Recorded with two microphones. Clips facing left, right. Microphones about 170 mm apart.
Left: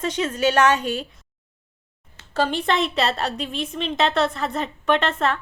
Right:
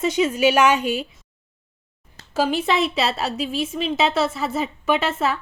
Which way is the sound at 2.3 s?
5° right (ahead or behind).